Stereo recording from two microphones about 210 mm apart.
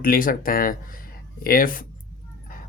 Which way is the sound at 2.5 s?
40° left (ahead or behind).